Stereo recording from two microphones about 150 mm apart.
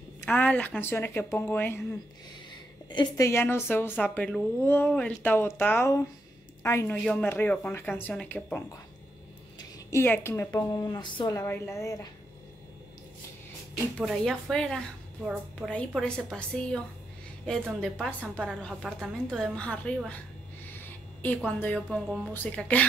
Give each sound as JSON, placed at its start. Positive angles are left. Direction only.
{"t": 0.2, "sound": "speech", "side_deg": 10}
{"t": 2.9, "sound": "a woman's voice", "side_deg": 30}
{"t": 3.3, "sound": "a woman's voice", "side_deg": 15}
{"t": 11.3, "sound": "a woman's voice", "side_deg": 15}
{"t": 13.9, "sound": "a woman's voice", "side_deg": 0}
{"t": 18.2, "sound": "a woman's voice", "side_deg": -10}
{"t": 18.6, "sound": "a woman's voice", "side_deg": 0}
{"t": 20.8, "sound": "a sound", "side_deg": 10}
{"t": 21.5, "sound": "speech", "side_deg": 10}
{"t": 21.7, "sound": "a woman's voice", "side_deg": 0}